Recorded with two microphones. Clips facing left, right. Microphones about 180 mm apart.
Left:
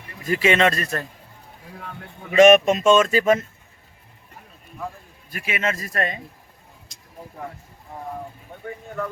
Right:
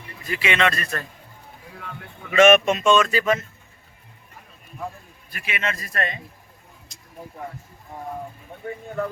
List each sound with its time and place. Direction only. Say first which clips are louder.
0.3 s speech: left 4 dB; 45° left (ahead or behind)
2.3 s speech: left 2 dB; 40° left (ahead or behind)
5.3 s speech: left 3 dB; 45° left (ahead or behind)